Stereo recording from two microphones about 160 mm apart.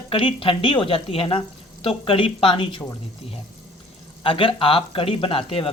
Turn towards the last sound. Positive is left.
turn(degrees=35)  # may be behind; listen again after turning